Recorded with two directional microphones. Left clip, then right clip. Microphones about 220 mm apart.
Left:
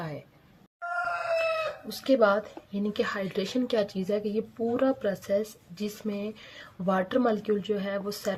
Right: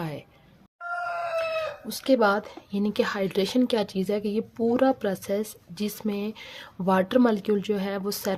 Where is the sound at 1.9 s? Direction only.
35° right (ahead or behind).